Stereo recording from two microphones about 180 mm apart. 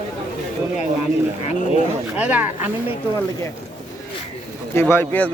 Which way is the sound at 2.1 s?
10° right (ahead or behind).